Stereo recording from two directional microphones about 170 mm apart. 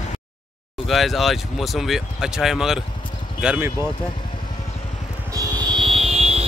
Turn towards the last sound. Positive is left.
turn(degrees=-35)  # may be behind; listen again after turning